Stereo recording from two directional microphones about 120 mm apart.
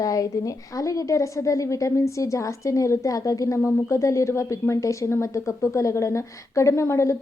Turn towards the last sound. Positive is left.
turn(degrees=25)  # may be behind; listen again after turning